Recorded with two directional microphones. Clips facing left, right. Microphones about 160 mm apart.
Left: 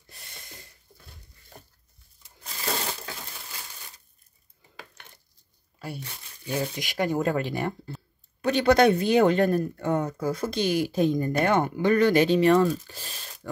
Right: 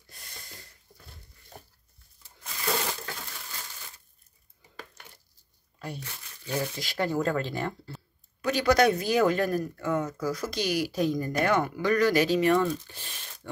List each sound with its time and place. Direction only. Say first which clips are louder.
5.8 s speech: left 1 dB; 10° left (ahead or behind)
8.4 s speech: left 3 dB; 30° left (ahead or behind)